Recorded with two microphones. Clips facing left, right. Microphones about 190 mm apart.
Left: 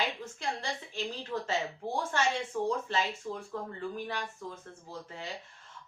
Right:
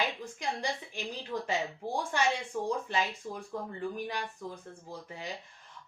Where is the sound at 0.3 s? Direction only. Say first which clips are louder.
Right 3 dB; 15° right (ahead or behind).